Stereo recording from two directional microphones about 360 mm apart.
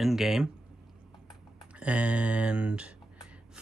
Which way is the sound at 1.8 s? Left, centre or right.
Centre.